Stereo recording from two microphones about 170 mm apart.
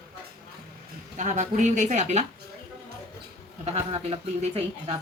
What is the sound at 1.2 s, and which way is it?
Speech, 45° right (ahead or behind).